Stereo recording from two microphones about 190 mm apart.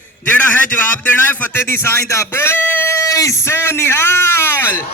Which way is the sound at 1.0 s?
10° left (ahead or behind).